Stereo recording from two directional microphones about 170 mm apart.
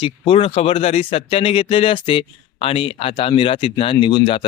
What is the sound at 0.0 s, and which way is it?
Speech, 30° left (ahead or behind).